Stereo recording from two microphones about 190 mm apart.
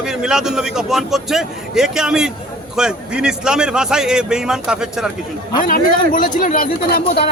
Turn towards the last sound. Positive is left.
turn(degrees=50)  # may be behind; listen again after turning